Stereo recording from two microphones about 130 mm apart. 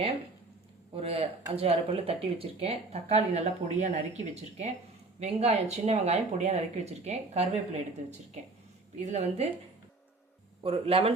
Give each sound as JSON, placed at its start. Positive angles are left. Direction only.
{"t": 0.9, "sound": "speech", "side_deg": -50}
{"t": 8.0, "sound": "speech", "side_deg": -80}
{"t": 9.0, "sound": "speech", "side_deg": -60}
{"t": 10.6, "sound": "speech", "side_deg": -50}